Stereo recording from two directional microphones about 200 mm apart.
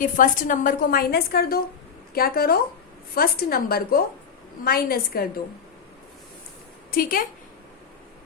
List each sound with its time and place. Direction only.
0.0 s a woman's voice: 40° left (ahead or behind)
6.9 s a woman's voice: 45° left (ahead or behind)